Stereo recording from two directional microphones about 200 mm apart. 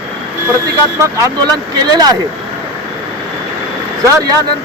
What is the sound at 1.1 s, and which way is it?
Speech, 15° right (ahead or behind).